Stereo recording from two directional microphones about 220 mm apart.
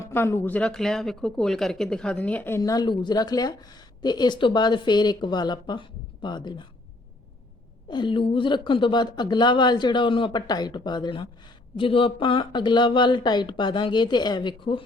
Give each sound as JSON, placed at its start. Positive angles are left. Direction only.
{"t": 0.0, "sound": "speech", "side_deg": 10}
{"t": 7.9, "sound": "speech", "side_deg": 20}